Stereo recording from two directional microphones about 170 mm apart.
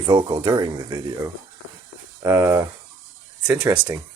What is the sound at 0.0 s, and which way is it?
Speech, 30° right (ahead or behind).